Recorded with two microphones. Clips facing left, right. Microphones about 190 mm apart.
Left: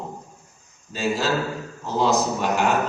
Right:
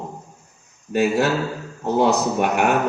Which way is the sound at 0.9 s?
60° right (ahead or behind).